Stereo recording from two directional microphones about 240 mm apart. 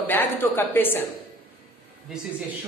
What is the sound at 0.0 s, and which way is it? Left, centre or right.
A woman's voice, centre.